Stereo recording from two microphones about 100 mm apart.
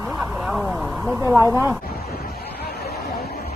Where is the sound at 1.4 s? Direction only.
25° right (ahead or behind).